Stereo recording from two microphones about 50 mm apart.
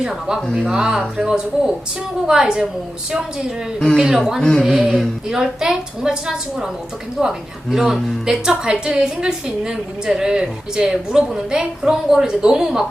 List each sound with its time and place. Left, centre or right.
0.0 s a woman's voice: centre
5.3 s a woman's voice: centre